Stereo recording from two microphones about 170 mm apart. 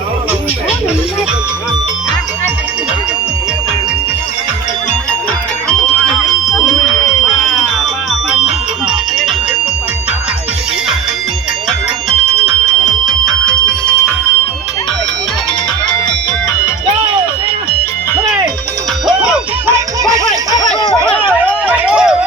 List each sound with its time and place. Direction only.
5.6 s music: 5° left (ahead or behind)
12.8 s fire alarm: centre (ahead or behind)
19.6 s music: 20° right (ahead or behind)
21.2 s a sound: 10° right (ahead or behind)